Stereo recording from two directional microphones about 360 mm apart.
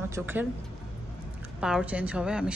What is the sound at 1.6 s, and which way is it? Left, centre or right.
Speech, centre.